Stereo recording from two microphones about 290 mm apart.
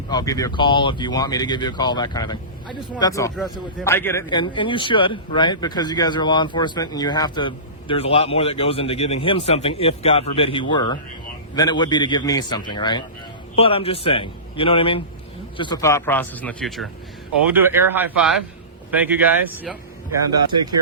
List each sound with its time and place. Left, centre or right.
0.1 s speech: centre
3.3 s a man's voice: centre